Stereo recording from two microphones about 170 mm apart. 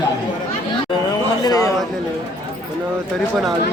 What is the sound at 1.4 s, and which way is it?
Speech, 20° left (ahead or behind).